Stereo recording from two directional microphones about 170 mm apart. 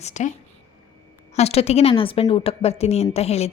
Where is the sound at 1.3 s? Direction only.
40° left (ahead or behind).